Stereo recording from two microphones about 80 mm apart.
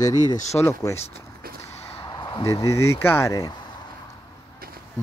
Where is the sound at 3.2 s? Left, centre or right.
Left.